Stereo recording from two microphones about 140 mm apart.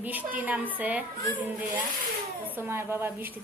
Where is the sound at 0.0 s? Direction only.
10° right (ahead or behind).